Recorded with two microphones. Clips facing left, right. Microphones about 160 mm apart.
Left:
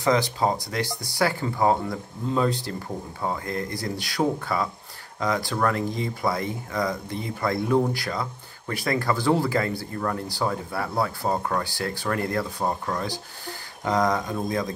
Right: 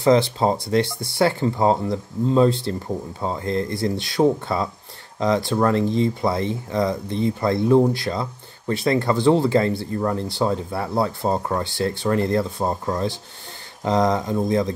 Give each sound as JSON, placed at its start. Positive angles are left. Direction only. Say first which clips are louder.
{"t": 0.0, "sound": "speech", "louder": "right 5 dB", "side_deg": -25}